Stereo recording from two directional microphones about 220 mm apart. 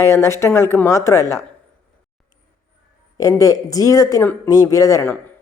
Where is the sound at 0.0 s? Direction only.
15° left (ahead or behind).